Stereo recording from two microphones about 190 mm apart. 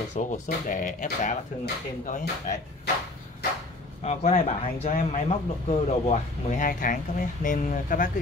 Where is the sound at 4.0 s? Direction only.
35° left (ahead or behind).